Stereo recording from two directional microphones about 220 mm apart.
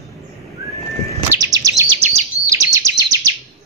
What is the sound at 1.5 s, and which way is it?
Chirp, 15° right (ahead or behind).